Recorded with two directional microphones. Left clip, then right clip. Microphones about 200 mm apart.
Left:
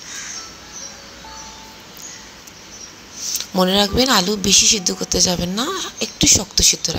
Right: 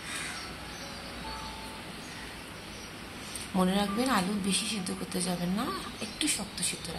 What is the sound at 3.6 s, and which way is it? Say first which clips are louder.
Speech: left 14 dB; 35° left (ahead or behind).